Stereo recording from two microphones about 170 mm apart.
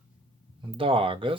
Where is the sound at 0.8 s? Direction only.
30° right (ahead or behind).